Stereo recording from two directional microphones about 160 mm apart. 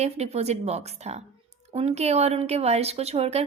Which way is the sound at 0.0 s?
45° right (ahead or behind).